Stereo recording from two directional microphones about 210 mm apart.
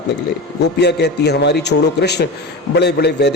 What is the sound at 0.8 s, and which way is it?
A man's voice, 55° left (ahead or behind).